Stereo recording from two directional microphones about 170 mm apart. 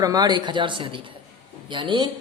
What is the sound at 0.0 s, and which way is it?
A woman's voice, 20° right (ahead or behind).